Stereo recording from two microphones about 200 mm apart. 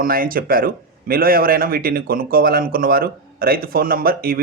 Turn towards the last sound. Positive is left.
turn(degrees=-45)  # may be behind; listen again after turning